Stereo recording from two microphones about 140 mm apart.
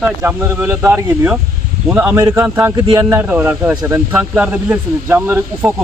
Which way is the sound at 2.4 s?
15° right (ahead or behind).